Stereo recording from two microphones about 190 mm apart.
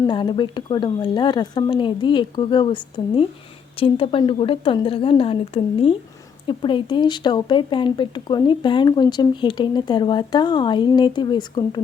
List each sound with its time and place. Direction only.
0.0 s speech: 25° left (ahead or behind)